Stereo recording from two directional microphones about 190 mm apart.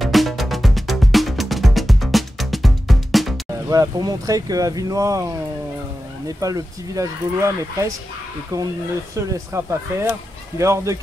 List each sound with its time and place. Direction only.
0.0 s music: centre (ahead or behind)
3.6 s speech: 20° right (ahead or behind)
9.1 s speech: 15° right (ahead or behind)